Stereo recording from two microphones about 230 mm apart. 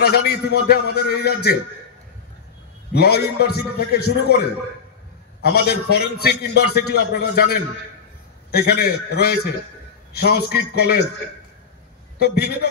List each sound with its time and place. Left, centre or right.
0.0 s a man's voice: left
2.9 s a man's voice: left
12.2 s a man's voice: left